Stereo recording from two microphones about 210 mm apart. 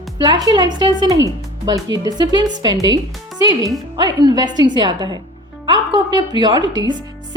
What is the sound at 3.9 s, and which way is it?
A woman's voice, 20° right (ahead or behind).